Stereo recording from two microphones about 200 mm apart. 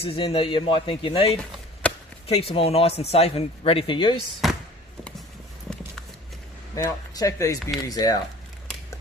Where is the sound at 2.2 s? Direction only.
30° left (ahead or behind).